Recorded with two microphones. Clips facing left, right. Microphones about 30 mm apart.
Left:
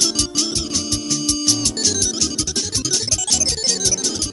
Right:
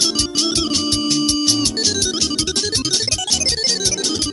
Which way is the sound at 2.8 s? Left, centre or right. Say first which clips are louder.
Right 2 dB; right.